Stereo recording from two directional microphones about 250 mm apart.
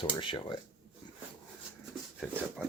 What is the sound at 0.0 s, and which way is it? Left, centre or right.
Speech, centre.